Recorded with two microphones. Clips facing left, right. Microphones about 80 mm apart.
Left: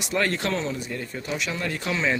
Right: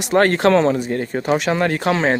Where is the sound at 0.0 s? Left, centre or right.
Right.